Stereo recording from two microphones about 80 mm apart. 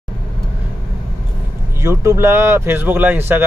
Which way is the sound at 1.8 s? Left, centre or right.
Right.